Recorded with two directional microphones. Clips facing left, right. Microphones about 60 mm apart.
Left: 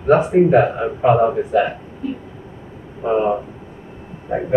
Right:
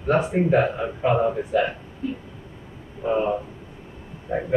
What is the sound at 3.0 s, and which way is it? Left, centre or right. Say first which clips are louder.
Speech: left 5 dB; left.